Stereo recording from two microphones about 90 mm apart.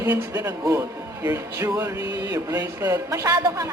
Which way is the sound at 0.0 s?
45° right (ahead or behind).